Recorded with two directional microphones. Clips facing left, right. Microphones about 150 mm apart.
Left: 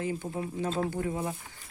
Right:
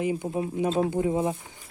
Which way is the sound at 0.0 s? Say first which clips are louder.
Right 6 dB; 15° right (ahead or behind).